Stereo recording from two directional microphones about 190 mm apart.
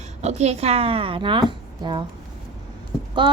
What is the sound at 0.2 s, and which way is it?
A woman's voice, 35° right (ahead or behind).